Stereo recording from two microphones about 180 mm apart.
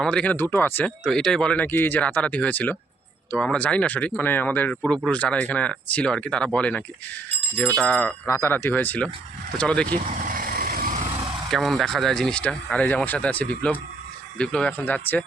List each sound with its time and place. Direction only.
0.0 s speech: 5° left (ahead or behind)
10.2 s vehicle: 50° right (ahead or behind)
11.5 s speech: centre (ahead or behind)